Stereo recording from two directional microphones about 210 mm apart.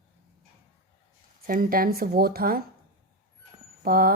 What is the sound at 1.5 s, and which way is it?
Speech, 45° right (ahead or behind).